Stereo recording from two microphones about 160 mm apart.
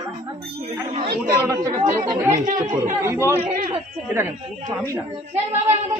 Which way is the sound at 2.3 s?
50° right (ahead or behind).